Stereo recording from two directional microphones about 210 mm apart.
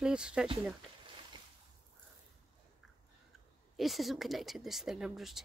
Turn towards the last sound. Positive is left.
turn(degrees=0)  # may be behind; listen again after turning